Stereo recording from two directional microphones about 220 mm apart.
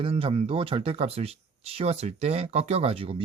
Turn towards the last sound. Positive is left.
turn(degrees=-25)  # may be behind; listen again after turning